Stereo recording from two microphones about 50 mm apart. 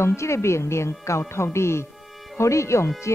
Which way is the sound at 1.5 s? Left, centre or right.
Left.